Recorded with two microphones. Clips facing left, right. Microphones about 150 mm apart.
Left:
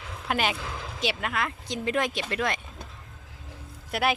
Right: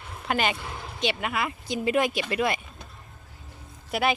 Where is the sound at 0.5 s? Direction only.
90° left.